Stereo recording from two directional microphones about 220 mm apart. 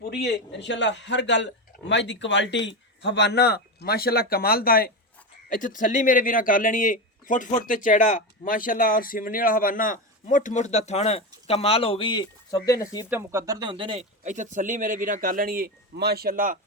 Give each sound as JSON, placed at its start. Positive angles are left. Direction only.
{"t": 0.0, "sound": "a man's voice", "side_deg": 50}
{"t": 13.1, "sound": "speech", "side_deg": -10}